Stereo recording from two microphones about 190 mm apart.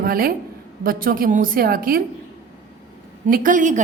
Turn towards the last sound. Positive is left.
turn(degrees=-40)  # may be behind; listen again after turning